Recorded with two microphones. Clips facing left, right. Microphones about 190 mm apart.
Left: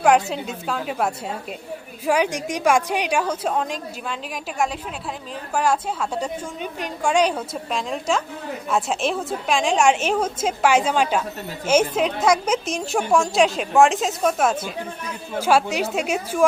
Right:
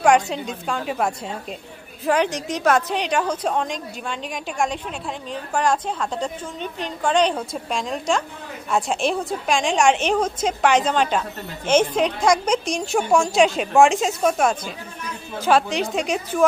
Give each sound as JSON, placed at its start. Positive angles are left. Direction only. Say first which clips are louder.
{"t": 0.0, "sound": "a woman's voice", "louder": "even", "side_deg": 5}